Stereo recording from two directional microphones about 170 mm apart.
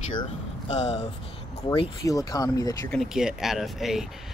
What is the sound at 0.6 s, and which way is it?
Speech, 40° left (ahead or behind).